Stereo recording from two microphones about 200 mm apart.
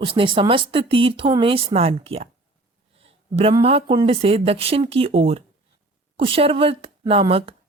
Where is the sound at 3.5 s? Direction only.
30° right (ahead or behind).